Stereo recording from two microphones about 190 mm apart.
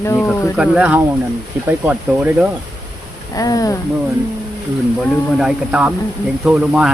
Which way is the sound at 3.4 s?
20° left (ahead or behind).